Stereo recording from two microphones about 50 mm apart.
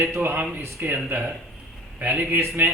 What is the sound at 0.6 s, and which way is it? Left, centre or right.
Speech, right.